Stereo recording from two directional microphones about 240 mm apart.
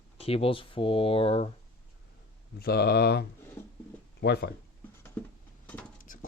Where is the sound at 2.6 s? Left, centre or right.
Left.